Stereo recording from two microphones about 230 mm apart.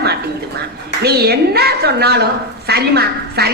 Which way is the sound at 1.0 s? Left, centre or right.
Right.